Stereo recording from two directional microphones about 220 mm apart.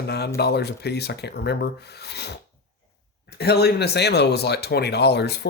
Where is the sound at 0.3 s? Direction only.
50° left (ahead or behind).